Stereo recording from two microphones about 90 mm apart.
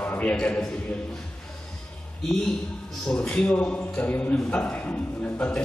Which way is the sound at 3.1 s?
15° left (ahead or behind).